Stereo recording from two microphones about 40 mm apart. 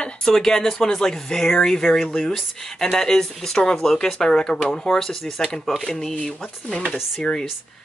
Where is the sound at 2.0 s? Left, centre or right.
Left.